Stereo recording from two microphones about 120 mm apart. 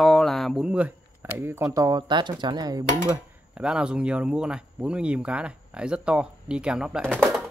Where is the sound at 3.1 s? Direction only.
10° right (ahead or behind).